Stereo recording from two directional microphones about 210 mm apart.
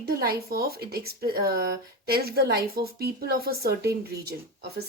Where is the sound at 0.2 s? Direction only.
45° right (ahead or behind).